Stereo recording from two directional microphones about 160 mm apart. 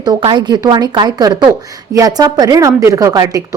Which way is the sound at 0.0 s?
25° right (ahead or behind).